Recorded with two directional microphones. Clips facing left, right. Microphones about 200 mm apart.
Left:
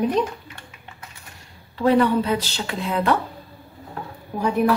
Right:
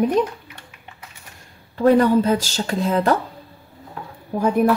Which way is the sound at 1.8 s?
45° right (ahead or behind).